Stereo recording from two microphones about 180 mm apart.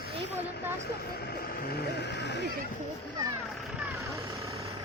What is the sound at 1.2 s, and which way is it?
Speech, 65° left (ahead or behind).